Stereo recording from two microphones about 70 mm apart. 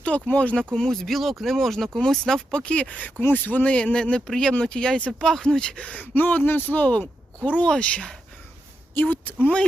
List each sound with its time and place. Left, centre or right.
0.0 s speech: centre
0.7 s speech: centre
9.0 s speech: left